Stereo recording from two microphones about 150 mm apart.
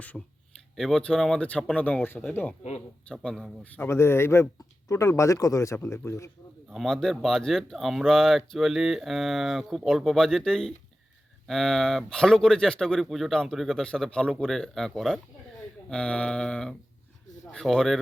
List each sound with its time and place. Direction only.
0.1 s speech: 5° left (ahead or behind)
3.8 s speech: 15° left (ahead or behind)
6.7 s speech: centre (ahead or behind)